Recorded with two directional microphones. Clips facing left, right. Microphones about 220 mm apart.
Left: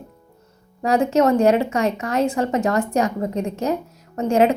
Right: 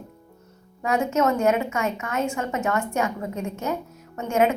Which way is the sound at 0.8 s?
35° left (ahead or behind).